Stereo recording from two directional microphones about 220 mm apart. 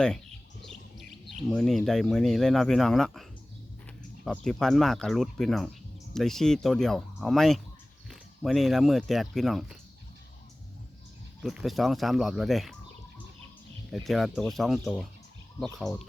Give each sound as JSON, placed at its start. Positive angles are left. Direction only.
{"t": 0.6, "sound": "speech", "side_deg": 0}
{"t": 11.4, "sound": "speech", "side_deg": 0}
{"t": 13.9, "sound": "speech", "side_deg": 0}